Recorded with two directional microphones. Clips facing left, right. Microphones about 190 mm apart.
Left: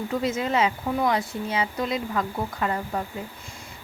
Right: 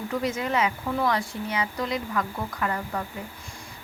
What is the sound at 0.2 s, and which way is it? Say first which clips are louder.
Speech: left 2 dB; 25° left (ahead or behind).